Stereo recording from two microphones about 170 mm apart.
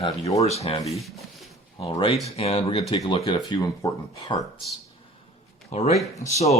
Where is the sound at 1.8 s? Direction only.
30° left (ahead or behind).